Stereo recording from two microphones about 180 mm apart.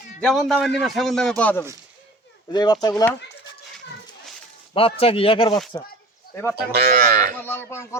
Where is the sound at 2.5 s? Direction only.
25° left (ahead or behind).